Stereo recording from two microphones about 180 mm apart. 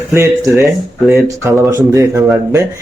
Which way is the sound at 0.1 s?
15° right (ahead or behind).